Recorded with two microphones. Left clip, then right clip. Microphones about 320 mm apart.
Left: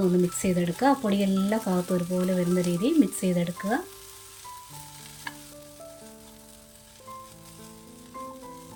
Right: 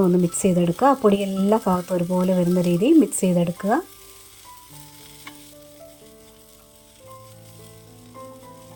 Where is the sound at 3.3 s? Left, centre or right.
Centre.